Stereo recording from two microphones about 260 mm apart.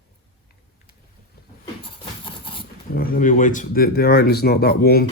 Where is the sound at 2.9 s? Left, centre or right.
Left.